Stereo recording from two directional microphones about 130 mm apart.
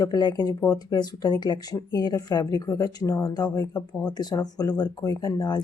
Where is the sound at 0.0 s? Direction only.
30° left (ahead or behind).